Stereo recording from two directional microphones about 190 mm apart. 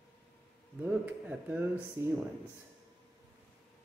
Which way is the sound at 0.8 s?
10° right (ahead or behind).